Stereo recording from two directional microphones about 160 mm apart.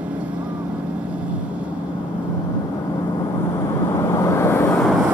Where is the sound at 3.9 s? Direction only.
15° left (ahead or behind).